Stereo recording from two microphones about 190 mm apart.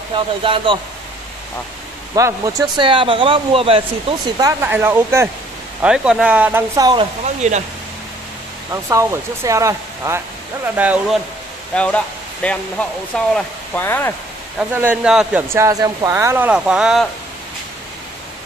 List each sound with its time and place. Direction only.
0.1 s speech: 25° right (ahead or behind)
2.1 s speech: 15° right (ahead or behind)
4.4 s speech: 20° right (ahead or behind)
7.4 s speech: 40° right (ahead or behind)
8.8 s speech: 15° right (ahead or behind)
11.7 s speech: 5° left (ahead or behind)
14.8 s speech: 5° right (ahead or behind)
15.5 s speech: 15° right (ahead or behind)